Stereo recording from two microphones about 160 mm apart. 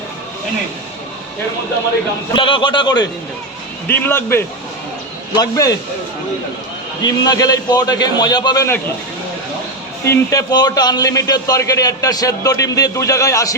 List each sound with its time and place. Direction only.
2.3 s a man's voice: 30° left (ahead or behind)
3.8 s a man's voice: 10° left (ahead or behind)
7.0 s a man's voice: 25° left (ahead or behind)
10.1 s a man's voice: 20° left (ahead or behind)